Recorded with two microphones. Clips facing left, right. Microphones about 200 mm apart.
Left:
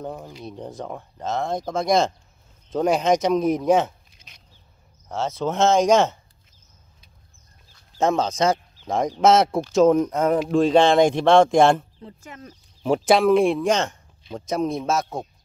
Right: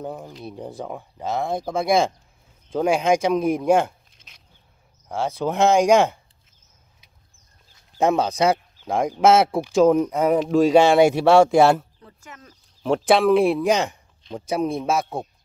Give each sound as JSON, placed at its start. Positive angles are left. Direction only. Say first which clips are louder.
{"t": 0.0, "sound": "speech", "louder": "right 1 dB", "side_deg": 0}
{"t": 3.8, "sound": "a sound", "louder": "even", "side_deg": 0}
{"t": 5.0, "sound": "speech", "louder": "right 1 dB", "side_deg": -10}
{"t": 8.0, "sound": "speech", "louder": "right 1 dB", "side_deg": -10}
{"t": 12.0, "sound": "speech", "louder": "left 4 dB", "side_deg": 25}
{"t": 12.8, "sound": "speech", "louder": "even", "side_deg": 0}